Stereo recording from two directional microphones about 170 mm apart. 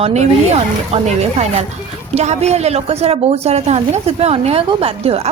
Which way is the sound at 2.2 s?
40° right (ahead or behind).